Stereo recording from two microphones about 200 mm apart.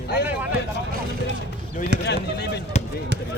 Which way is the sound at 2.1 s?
55° left (ahead or behind).